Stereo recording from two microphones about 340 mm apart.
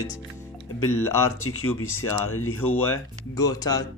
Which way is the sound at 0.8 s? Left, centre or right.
Left.